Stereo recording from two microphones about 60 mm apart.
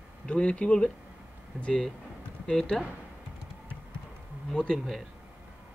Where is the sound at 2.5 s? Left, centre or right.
Centre.